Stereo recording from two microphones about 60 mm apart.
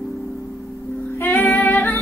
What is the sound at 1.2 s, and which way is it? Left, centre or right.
Music, left.